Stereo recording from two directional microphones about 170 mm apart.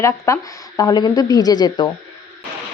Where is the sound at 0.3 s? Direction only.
15° left (ahead or behind).